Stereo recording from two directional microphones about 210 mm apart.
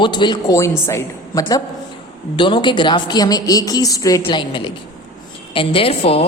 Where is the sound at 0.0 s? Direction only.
20° left (ahead or behind).